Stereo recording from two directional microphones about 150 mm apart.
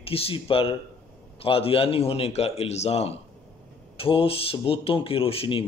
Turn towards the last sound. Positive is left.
turn(degrees=40)  # may be behind; listen again after turning